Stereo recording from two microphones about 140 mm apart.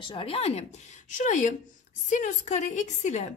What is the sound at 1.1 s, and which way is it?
A woman's voice, 65° left (ahead or behind).